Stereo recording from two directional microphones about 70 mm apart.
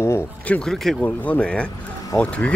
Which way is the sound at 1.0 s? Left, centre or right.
Left.